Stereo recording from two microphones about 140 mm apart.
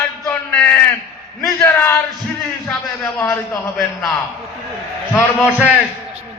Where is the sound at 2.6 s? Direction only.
15° left (ahead or behind).